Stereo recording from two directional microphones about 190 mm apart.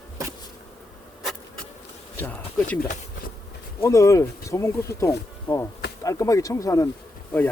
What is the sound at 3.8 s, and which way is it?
Speech, 15° left (ahead or behind).